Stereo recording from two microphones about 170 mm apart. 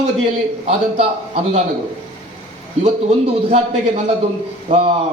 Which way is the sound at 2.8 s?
35° right (ahead or behind).